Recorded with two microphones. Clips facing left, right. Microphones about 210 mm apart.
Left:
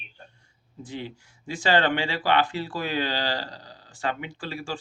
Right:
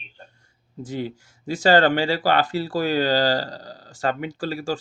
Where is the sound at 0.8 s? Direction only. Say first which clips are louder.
Right 6 dB; 40° right (ahead or behind).